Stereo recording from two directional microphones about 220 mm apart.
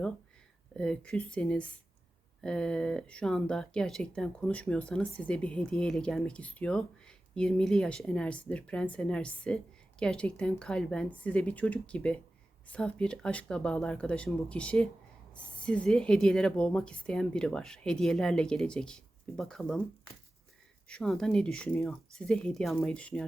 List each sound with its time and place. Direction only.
0.8 s speech: 5° left (ahead or behind)
20.8 s speech: 5° left (ahead or behind)